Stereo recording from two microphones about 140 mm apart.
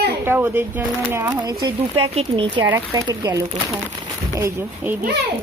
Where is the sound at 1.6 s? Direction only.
40° right (ahead or behind).